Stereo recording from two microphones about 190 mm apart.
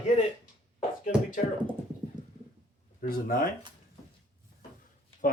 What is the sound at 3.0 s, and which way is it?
Speech, 50° left (ahead or behind).